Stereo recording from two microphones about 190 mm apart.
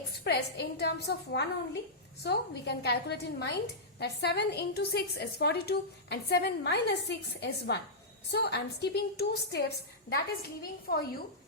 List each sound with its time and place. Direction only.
0.3 s a woman's voice: 60° left (ahead or behind)